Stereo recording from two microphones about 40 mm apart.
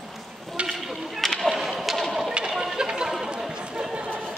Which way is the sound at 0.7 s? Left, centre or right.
Centre.